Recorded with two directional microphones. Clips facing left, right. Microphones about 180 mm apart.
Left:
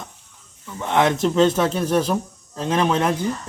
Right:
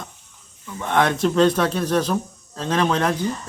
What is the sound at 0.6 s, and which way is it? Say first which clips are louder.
Speech: left 1 dB; 5° left (ahead or behind).